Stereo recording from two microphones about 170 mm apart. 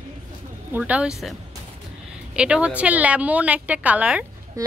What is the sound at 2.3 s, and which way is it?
Speech, 5° right (ahead or behind).